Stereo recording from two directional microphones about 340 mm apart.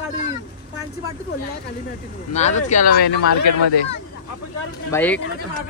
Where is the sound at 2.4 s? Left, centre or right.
Left.